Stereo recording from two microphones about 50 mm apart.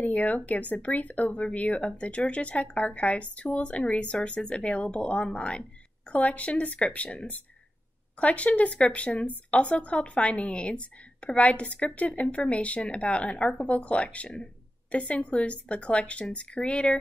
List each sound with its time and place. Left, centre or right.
0.0 s speech: left